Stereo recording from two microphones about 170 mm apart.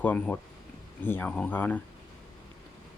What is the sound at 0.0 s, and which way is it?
Speech, 10° left (ahead or behind).